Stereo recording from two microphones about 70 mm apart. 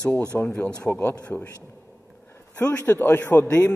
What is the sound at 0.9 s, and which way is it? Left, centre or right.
Speech, left.